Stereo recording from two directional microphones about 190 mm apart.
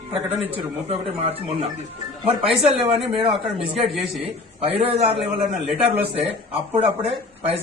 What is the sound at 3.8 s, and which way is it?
Speech, centre (ahead or behind).